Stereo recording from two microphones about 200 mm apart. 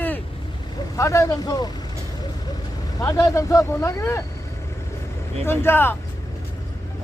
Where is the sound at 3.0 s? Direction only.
15° left (ahead or behind).